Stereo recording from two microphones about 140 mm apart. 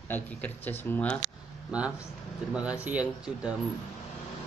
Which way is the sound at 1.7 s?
5° right (ahead or behind).